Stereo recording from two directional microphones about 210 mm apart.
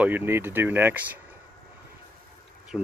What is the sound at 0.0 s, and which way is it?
Speech, 10° right (ahead or behind).